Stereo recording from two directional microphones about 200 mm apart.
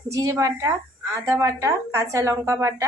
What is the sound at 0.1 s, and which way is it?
Speech, 15° right (ahead or behind).